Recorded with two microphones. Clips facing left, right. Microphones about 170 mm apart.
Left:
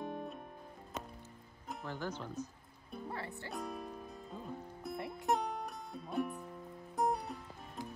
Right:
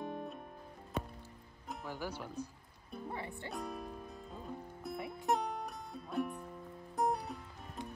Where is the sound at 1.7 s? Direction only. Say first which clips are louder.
Left 1 dB; 5° right (ahead or behind).